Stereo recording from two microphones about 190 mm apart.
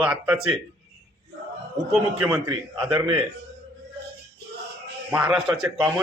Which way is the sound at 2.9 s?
20° right (ahead or behind).